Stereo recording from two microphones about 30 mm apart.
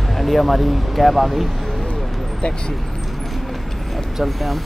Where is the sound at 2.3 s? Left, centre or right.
Left.